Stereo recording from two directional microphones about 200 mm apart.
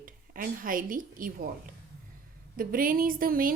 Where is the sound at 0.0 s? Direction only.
45° right (ahead or behind).